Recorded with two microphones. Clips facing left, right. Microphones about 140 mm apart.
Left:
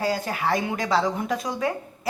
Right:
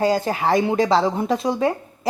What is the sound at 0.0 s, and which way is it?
A woman's voice, 35° right (ahead or behind).